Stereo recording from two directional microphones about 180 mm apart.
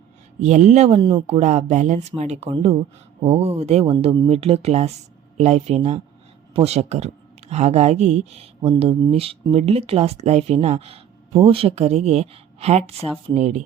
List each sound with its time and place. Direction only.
0.4 s speech: 40° right (ahead or behind)